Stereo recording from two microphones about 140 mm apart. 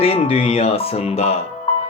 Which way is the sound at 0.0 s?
45° left (ahead or behind).